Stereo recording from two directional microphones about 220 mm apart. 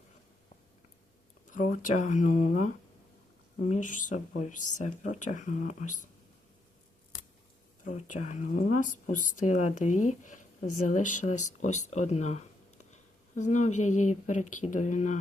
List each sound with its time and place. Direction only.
1.5 s speech: 35° left (ahead or behind)
8.1 s speech: 35° left (ahead or behind)